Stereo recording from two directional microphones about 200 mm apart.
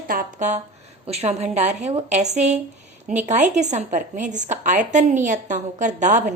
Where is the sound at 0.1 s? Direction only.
40° right (ahead or behind).